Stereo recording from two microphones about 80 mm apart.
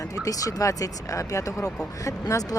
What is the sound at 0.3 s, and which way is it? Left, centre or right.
Speech, left.